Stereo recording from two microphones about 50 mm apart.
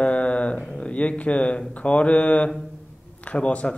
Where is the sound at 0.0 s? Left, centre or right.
Left.